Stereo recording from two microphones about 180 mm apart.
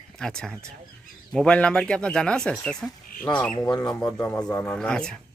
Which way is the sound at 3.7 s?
20° left (ahead or behind).